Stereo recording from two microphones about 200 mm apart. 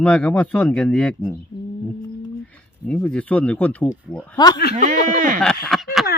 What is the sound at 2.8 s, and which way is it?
A man's voice, 5° left (ahead or behind).